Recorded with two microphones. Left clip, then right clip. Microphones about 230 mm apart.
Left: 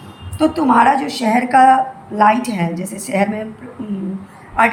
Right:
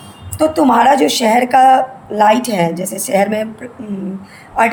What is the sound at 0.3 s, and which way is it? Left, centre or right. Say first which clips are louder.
A woman's voice: right 2 dB; right.